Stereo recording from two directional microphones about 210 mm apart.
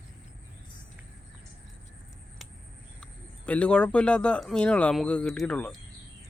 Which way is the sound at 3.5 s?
5° left (ahead or behind).